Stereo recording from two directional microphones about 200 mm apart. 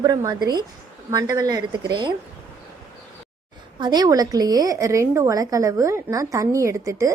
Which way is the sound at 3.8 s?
20° right (ahead or behind).